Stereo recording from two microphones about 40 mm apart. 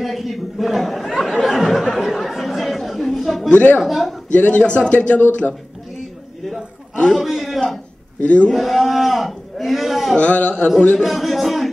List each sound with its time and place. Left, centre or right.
0.0 s speech: centre
1.4 s chatter: centre
3.5 s speech: left
3.8 s speech: centre
4.3 s speech: left
7.2 s a man's voice: centre
8.2 s speech: left
8.5 s speech: centre
10.1 s speech: left
11.0 s speech: centre